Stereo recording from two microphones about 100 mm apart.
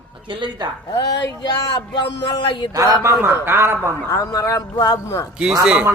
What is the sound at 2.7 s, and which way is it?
Speech, 30° right (ahead or behind).